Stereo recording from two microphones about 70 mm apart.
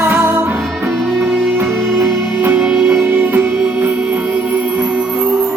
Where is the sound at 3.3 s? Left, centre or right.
Right.